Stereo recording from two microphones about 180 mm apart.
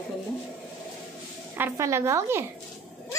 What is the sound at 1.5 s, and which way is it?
Speech, 15° right (ahead or behind).